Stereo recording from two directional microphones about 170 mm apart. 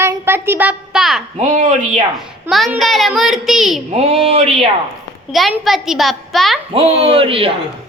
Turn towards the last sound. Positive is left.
turn(degrees=-30)  # may be behind; listen again after turning